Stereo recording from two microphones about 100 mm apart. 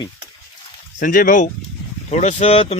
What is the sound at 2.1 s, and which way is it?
Speech, 90° left.